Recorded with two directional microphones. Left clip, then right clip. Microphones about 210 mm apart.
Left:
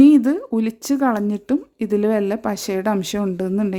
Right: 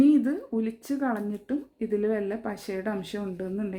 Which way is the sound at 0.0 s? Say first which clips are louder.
Left 9 dB; 50° left (ahead or behind).